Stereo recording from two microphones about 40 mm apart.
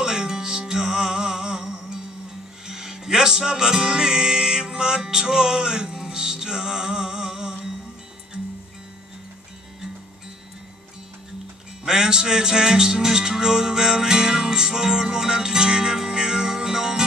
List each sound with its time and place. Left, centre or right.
0.0 s music: centre
11.8 s music: centre